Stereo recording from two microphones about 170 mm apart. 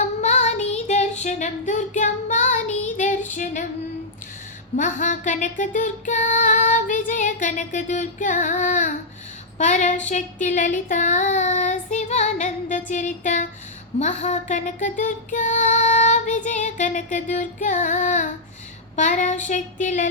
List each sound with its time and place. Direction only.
0.0 s child singing: 45° left (ahead or behind)
3.3 s female singing: 45° left (ahead or behind)
4.8 s music: 50° left (ahead or behind)